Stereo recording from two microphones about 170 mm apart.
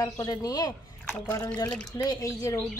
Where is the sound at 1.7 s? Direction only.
5° left (ahead or behind).